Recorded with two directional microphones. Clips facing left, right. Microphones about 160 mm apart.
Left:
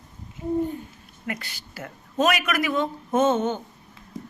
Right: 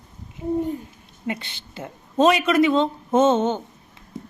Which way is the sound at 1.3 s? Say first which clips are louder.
Right 4 dB; 25° right (ahead or behind).